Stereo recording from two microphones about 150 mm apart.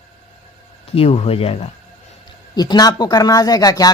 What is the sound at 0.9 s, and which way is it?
Speech, 40° left (ahead or behind).